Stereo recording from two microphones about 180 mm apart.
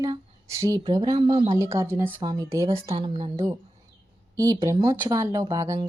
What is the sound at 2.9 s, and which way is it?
Speech, 30° right (ahead or behind).